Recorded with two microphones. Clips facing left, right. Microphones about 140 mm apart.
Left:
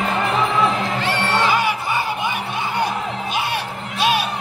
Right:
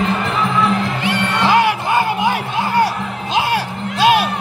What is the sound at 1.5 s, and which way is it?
Music, 65° right (ahead or behind).